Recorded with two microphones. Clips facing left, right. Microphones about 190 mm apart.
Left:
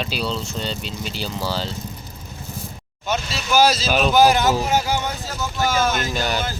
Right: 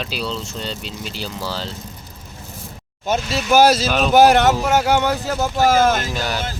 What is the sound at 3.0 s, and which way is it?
Speech, 55° right (ahead or behind).